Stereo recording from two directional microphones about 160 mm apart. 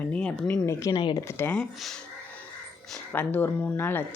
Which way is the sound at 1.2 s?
15° left (ahead or behind).